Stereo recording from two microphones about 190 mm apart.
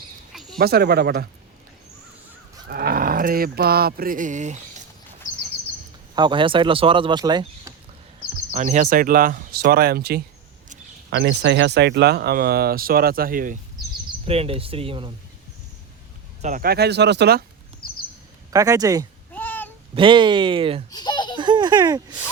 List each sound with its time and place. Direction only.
0.6 s speech: 55° right (ahead or behind)
2.6 s a sound: 50° right (ahead or behind)
6.1 s speech: 25° right (ahead or behind)
8.5 s speech: 40° right (ahead or behind); by 10.2 s 55° right (ahead or behind)
11.1 s speech: 70° right (ahead or behind); by 13.6 s 45° right (ahead or behind)
14.3 s speech: 30° right (ahead or behind)
16.4 s speech: 45° right (ahead or behind)
18.5 s speech: 15° right (ahead or behind)
19.3 s a sound: 10° left (ahead or behind)
20.0 s speech: 25° right (ahead or behind)
20.9 s giggle: 20° left (ahead or behind)
21.3 s baby laughter: 25° right (ahead or behind)